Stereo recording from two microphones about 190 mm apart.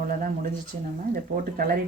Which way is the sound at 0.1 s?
45° right (ahead or behind).